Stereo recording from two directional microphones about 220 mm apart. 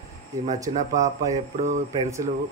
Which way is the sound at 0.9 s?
15° right (ahead or behind).